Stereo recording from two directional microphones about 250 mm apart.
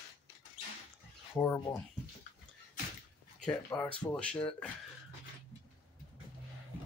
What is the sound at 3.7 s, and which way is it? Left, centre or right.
Speech, centre.